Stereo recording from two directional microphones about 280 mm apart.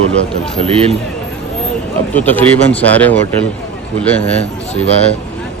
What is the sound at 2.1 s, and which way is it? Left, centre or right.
Speech, centre.